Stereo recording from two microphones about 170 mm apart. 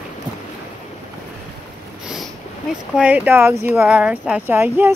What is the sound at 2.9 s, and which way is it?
Speech, 10° right (ahead or behind).